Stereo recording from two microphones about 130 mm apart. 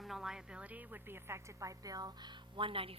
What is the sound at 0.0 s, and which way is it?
A woman's voice, centre (ahead or behind).